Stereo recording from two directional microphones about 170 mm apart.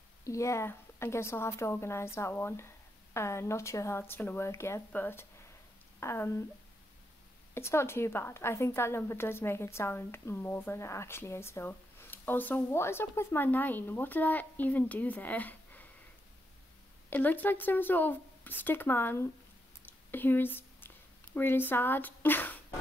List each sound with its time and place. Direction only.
0.2 s a woman's voice: 20° left (ahead or behind)
7.5 s a woman's voice: 15° left (ahead or behind)
17.1 s a woman's voice: 10° left (ahead or behind)
20.1 s a sound: 10° left (ahead or behind)
21.4 s a woman's voice: 10° left (ahead or behind)